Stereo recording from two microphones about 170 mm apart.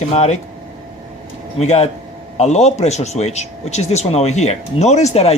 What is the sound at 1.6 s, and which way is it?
A man's voice, 40° left (ahead or behind).